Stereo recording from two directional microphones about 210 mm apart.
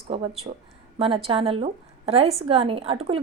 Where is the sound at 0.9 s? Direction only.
25° right (ahead or behind).